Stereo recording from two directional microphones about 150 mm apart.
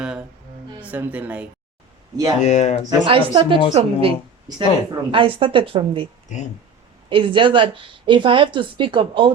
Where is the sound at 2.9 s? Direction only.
35° right (ahead or behind).